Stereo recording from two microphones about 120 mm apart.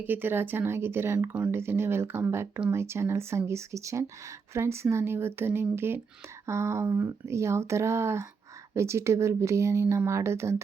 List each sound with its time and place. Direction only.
0.1 s speech: 15° right (ahead or behind)